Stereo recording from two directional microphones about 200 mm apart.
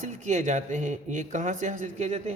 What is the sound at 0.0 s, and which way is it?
Speech, 35° right (ahead or behind).